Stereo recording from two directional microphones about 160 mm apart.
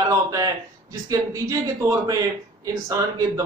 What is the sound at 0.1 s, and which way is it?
A man's voice, 20° right (ahead or behind).